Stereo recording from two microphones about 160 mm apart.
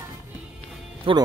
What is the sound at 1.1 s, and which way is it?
Speech, 35° right (ahead or behind).